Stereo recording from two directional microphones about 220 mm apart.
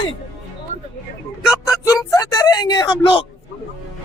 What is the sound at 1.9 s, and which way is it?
Speech, 15° left (ahead or behind).